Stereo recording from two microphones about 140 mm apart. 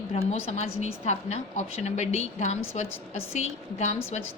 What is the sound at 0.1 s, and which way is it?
A woman's voice, 45° left (ahead or behind).